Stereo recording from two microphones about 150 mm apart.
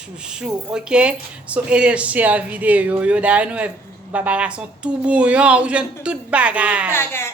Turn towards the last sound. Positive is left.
turn(degrees=15)  # may be behind; listen again after turning